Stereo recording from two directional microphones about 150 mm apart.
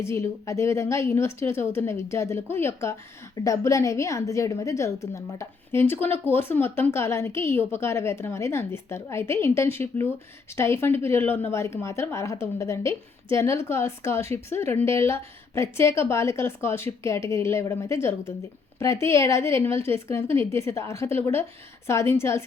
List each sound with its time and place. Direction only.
0.0 s a woman's voice: 20° left (ahead or behind)